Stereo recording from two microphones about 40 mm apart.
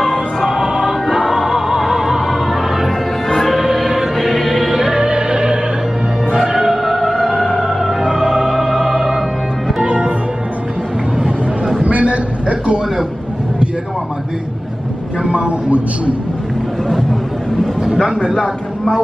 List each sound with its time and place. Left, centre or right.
0.0 s music: centre
0.5 s music: centre
4.8 s music: right
9.8 s music: right
11.8 s a sound: right
15.2 s vehicle: right
18.3 s a sound: centre